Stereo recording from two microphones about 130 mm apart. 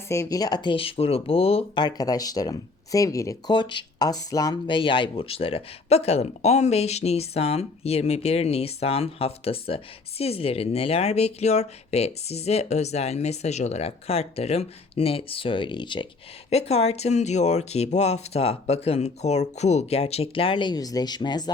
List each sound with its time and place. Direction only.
0.1 s speech: 25° left (ahead or behind); by 1.8 s 50° left (ahead or behind)
1.8 s speech: 30° left (ahead or behind)
16.5 s speech: 55° left (ahead or behind); by 21.5 s 35° left (ahead or behind)